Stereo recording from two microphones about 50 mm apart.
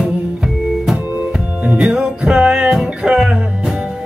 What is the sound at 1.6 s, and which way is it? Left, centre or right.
Music, centre.